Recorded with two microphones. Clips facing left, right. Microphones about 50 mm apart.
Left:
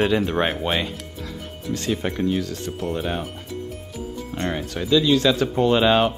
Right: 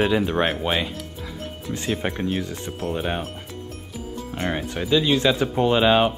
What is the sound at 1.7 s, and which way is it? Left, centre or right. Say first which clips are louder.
Speech: left 1 dB; centre.